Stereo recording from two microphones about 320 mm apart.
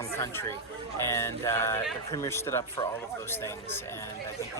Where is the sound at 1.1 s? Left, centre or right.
Centre.